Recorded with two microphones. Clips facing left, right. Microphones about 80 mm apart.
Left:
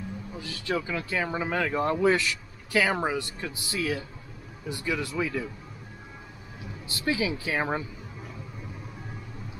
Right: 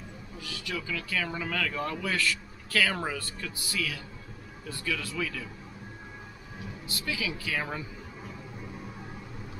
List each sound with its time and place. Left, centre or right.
0.4 s speech: left
6.9 s speech: left